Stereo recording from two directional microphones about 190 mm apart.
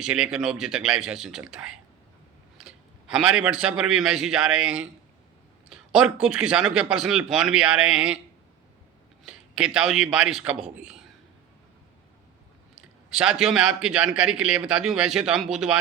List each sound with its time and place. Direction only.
0.0 s a man's voice: 5° right (ahead or behind)
9.2 s a man's voice: 5° right (ahead or behind)
12.7 s a man's voice: 5° right (ahead or behind)